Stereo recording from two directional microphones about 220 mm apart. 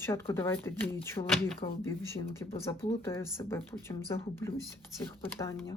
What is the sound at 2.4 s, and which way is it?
Speech, 25° left (ahead or behind).